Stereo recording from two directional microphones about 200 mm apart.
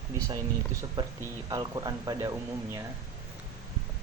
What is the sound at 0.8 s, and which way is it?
Speech, 15° right (ahead or behind).